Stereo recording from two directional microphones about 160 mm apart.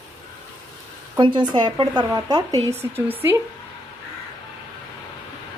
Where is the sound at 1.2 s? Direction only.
30° right (ahead or behind).